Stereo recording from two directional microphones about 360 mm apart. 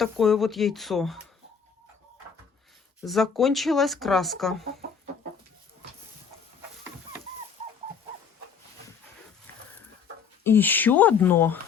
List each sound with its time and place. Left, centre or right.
0.0 s speech: centre
3.0 s speech: centre
7.6 s a sound: centre
10.4 s speech: centre